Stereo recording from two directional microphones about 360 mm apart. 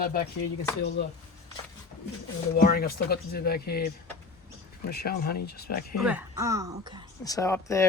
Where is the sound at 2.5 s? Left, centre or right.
Left.